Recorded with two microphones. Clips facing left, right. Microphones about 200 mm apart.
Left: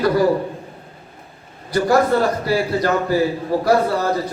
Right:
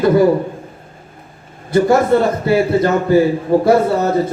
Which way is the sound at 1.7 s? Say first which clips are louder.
Right 4 dB; 25° right (ahead or behind).